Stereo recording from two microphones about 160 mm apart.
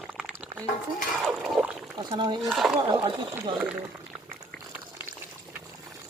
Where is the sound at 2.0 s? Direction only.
30° right (ahead or behind).